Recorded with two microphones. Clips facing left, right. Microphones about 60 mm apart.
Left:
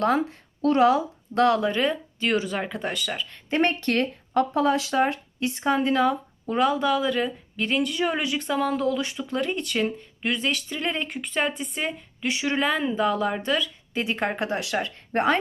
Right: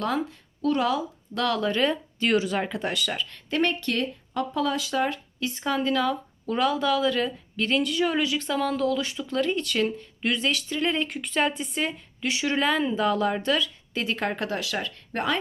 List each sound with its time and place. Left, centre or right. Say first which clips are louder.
0.0 s speech: left 5 dB; left
1.6 s speech: even; centre
2.3 s speech: right 2 dB; centre
3.5 s speech: left 3 dB; left
4.5 s a woman's voice: left 1 dB; left
6.8 s speech: even; centre; by 15.4 s left